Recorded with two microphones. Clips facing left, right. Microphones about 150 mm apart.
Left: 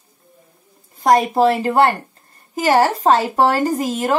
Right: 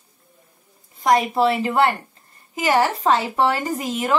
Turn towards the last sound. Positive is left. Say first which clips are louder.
# left 3 dB
turn(degrees=40)  # may be behind; listen again after turning